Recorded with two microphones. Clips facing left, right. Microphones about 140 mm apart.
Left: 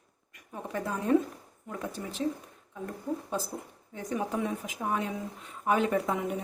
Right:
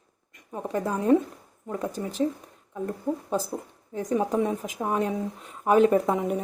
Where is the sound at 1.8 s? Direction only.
40° right (ahead or behind).